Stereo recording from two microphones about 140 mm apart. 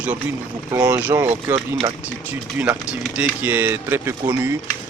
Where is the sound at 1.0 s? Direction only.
15° right (ahead or behind).